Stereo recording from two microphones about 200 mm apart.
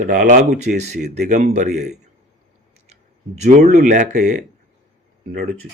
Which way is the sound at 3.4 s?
35° right (ahead or behind).